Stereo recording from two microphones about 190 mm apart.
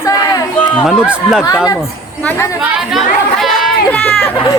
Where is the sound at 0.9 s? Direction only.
5° right (ahead or behind).